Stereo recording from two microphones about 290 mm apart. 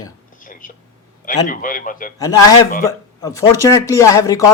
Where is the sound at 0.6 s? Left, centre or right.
Left.